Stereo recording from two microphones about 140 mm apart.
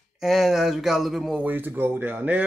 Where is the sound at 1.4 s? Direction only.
15° right (ahead or behind).